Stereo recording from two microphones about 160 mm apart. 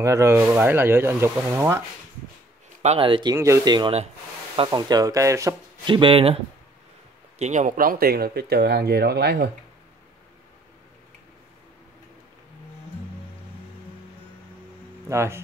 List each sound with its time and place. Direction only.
0.0 s speech: 20° right (ahead or behind)
2.8 s speech: 35° right (ahead or behind)
3.3 s speech: 15° right (ahead or behind)
5.9 s speech: 30° right (ahead or behind)
7.3 s speech: 45° right (ahead or behind); by 9.5 s 90° right
15.0 s speech: 15° right (ahead or behind)